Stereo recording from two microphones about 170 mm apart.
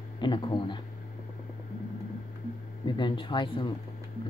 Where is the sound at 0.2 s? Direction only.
25° left (ahead or behind).